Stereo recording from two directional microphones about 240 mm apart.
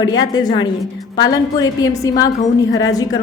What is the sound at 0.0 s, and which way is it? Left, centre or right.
A woman's voice, centre.